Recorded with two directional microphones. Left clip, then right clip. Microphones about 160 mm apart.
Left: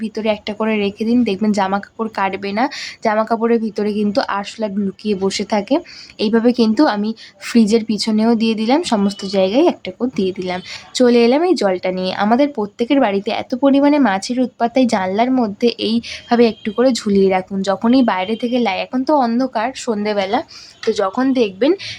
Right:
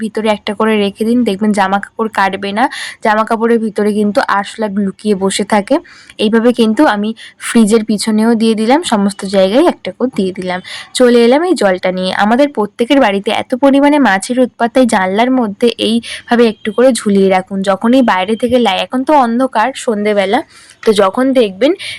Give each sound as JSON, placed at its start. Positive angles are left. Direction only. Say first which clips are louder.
{"t": 0.0, "sound": "a woman's voice", "louder": "right 5 dB", "side_deg": -25}